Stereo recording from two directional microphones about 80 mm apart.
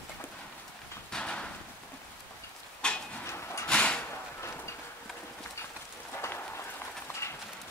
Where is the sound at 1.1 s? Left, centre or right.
Centre.